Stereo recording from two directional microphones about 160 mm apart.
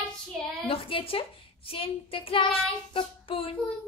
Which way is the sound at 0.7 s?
35° left (ahead or behind).